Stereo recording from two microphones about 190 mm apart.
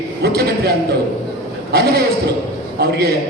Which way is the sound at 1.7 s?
55° right (ahead or behind).